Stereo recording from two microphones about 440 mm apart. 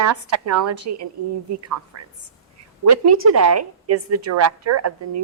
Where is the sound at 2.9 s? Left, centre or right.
Right.